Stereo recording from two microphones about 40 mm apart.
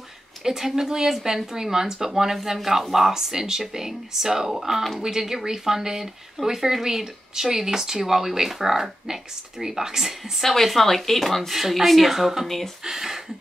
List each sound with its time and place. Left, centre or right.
0.4 s speech: centre
10.4 s speech: centre
12.4 s speech: centre
12.8 s speech: centre